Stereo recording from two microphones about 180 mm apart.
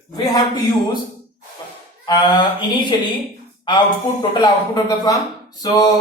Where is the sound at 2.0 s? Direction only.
25° left (ahead or behind).